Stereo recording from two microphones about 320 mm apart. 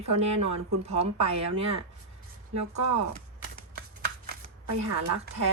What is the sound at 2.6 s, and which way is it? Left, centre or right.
Speech, right.